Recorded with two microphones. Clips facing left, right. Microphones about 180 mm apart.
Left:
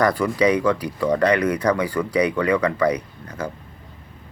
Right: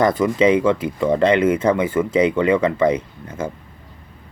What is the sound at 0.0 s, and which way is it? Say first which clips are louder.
Speech: right 3 dB; 20° right (ahead or behind).